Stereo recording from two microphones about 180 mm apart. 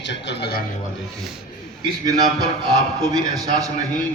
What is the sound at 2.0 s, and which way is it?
A man's voice, 20° right (ahead or behind).